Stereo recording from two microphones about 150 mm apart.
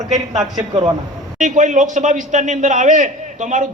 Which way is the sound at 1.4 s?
55° right (ahead or behind).